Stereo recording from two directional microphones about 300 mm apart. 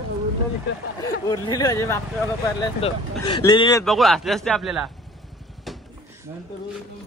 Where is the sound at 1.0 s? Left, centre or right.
Centre.